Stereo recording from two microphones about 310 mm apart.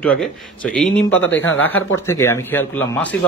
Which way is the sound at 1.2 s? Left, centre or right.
Left.